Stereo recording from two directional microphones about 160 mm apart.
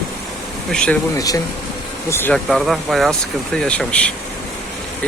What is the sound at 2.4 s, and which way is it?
Speech, centre (ahead or behind).